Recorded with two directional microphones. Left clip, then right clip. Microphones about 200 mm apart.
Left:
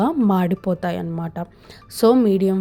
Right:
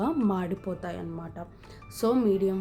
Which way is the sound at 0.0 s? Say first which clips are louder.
Left 9 dB; 40° left (ahead or behind).